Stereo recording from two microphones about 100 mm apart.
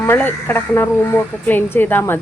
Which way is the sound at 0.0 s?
20° left (ahead or behind).